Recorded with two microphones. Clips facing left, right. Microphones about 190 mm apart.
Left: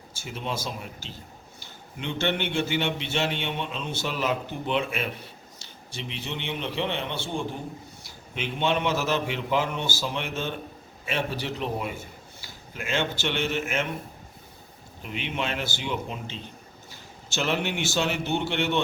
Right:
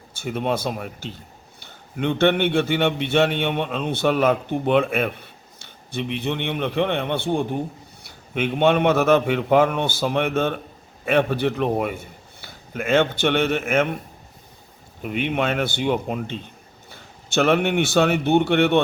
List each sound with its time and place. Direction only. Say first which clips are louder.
0.1 s a man's voice: right 9 dB; 60° right (ahead or behind)
15.0 s a man's voice: right 8 dB; 55° right (ahead or behind)